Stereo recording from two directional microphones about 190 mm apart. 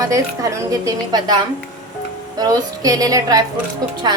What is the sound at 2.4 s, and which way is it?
A woman's voice, 20° right (ahead or behind).